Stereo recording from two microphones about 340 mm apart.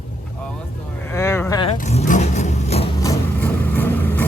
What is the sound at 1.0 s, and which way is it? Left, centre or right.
Vehicle, centre.